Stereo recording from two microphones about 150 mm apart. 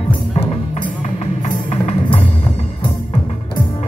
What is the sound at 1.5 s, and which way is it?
Music, 50° left (ahead or behind).